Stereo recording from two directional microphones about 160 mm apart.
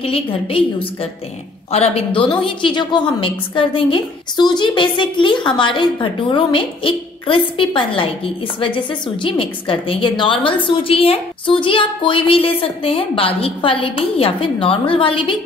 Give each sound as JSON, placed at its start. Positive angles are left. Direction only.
{"t": 0.0, "sound": "a woman's voice", "side_deg": 35}